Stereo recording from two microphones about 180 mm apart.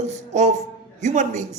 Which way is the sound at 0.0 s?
40° right (ahead or behind).